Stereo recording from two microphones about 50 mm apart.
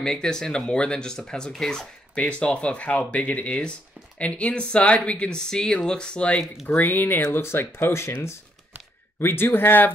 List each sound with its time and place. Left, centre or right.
0.0 s speech: centre
5.5 s speech: centre
6.7 s speech: left
7.2 s speech: left
9.2 s speech: left